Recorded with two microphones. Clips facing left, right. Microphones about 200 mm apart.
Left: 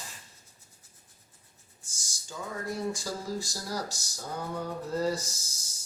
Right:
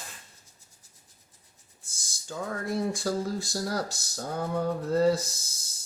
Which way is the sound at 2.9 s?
60° right (ahead or behind).